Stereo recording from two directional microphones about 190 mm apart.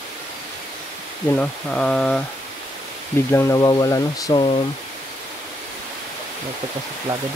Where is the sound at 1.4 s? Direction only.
5° left (ahead or behind).